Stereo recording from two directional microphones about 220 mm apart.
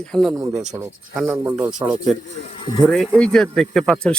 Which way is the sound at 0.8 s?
5° right (ahead or behind).